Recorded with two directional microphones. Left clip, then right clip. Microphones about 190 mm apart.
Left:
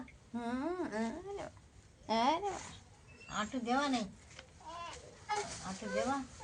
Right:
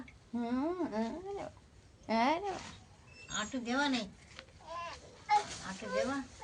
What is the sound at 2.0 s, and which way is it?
Speech, 40° right (ahead or behind).